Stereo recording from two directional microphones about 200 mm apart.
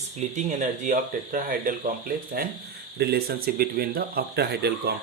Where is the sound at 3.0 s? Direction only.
50° right (ahead or behind).